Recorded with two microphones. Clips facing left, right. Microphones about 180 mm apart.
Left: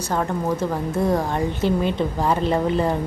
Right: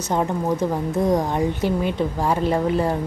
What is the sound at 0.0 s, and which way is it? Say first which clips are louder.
A woman's voice: right 1 dB; 20° right (ahead or behind).